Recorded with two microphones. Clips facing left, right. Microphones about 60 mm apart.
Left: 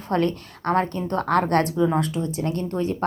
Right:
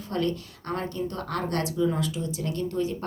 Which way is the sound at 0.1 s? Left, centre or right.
Left.